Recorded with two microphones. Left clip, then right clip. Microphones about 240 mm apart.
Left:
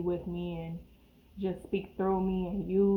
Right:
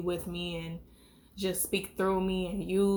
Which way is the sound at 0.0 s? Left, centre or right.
Right.